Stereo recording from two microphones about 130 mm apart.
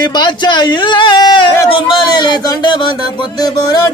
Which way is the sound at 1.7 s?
35° left (ahead or behind).